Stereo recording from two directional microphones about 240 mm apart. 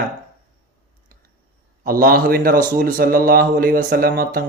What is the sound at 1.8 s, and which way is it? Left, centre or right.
A man's voice, right.